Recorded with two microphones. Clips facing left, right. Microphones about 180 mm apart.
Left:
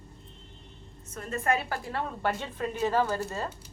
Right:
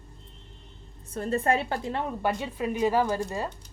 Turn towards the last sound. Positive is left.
turn(degrees=-15)  # may be behind; listen again after turning